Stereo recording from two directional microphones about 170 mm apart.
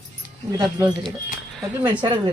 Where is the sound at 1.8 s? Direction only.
25° right (ahead or behind).